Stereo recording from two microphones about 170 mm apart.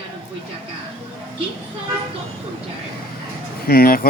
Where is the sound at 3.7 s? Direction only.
60° left (ahead or behind).